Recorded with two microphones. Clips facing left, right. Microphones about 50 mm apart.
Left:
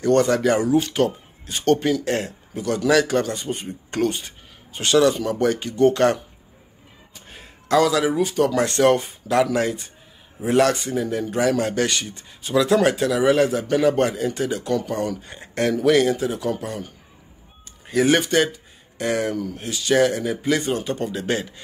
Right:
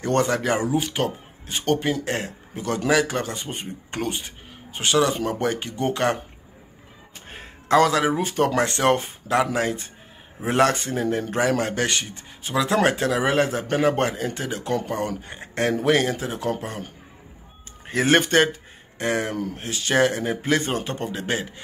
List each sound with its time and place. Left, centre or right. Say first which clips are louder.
0.0 s speech: left 4 dB; right
2.9 s speech: left 3 dB; centre
7.2 s speech: right 1 dB; right
12.7 s speech: even; right
19.3 s speech: left 1 dB; right